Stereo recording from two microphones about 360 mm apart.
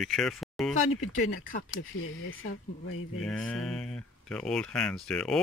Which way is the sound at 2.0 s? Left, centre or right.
Left.